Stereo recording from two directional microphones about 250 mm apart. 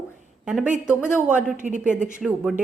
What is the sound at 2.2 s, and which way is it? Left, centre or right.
Speech, centre.